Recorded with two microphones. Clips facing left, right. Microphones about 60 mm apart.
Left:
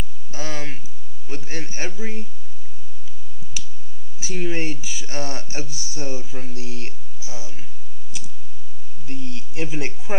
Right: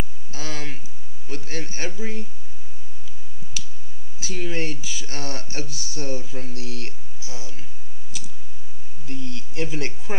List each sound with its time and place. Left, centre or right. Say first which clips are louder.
0.3 s a sound: left 2 dB; centre
1.3 s a man's voice: even; centre
3.6 s clicking: even; centre
4.2 s speech: left 2 dB; centre
9.0 s speech: even; centre